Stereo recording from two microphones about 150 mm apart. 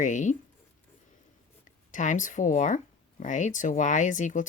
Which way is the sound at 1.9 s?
55° left (ahead or behind).